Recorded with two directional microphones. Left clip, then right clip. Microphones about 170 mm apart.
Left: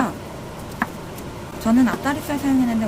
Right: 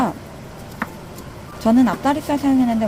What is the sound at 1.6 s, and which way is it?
Speech, 25° right (ahead or behind).